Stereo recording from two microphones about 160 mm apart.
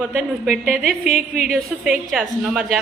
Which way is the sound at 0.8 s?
65° right (ahead or behind).